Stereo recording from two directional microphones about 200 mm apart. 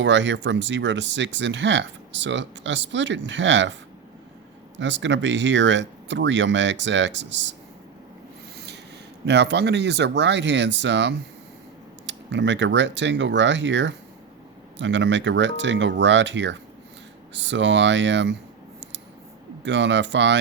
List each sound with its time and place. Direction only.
0.0 s speech: 65° right (ahead or behind)
4.8 s speech: 65° right (ahead or behind)
8.5 s rub: 55° right (ahead or behind)
9.2 s speech: 60° right (ahead or behind)
19.6 s speech: 65° right (ahead or behind)